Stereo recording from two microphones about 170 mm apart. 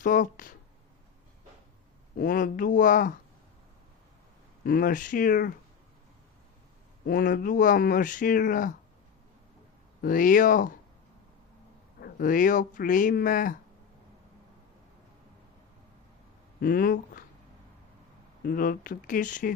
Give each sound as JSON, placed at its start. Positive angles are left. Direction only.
{"t": 0.0, "sound": "speech", "side_deg": 50}
{"t": 2.1, "sound": "speech", "side_deg": 55}
{"t": 4.6, "sound": "speech", "side_deg": 60}
{"t": 7.0, "sound": "speech", "side_deg": 60}
{"t": 10.0, "sound": "speech", "side_deg": 55}
{"t": 11.9, "sound": "speech", "side_deg": 60}
{"t": 16.6, "sound": "speech", "side_deg": 60}
{"t": 18.4, "sound": "speech", "side_deg": 60}